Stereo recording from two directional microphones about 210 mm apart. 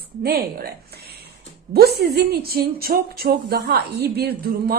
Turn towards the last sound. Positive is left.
turn(degrees=-45)  # may be behind; listen again after turning